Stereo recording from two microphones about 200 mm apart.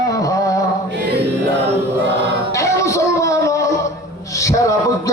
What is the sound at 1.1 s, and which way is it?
Music, 55° right (ahead or behind).